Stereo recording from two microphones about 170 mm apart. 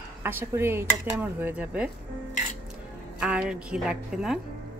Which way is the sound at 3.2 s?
5° right (ahead or behind).